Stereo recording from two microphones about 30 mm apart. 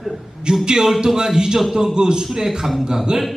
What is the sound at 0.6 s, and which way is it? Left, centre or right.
A man's voice, right.